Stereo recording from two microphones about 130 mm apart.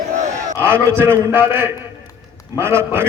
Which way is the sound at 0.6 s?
15° right (ahead or behind).